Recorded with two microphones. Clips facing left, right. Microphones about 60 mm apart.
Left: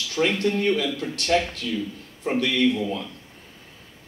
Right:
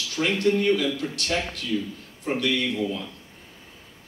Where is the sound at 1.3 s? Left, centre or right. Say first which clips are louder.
Left 8 dB; right.